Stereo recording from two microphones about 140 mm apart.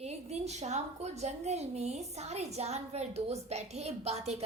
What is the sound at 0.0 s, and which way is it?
A woman's voice, 50° right (ahead or behind).